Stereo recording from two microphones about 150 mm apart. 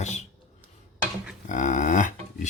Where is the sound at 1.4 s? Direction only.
55° left (ahead or behind).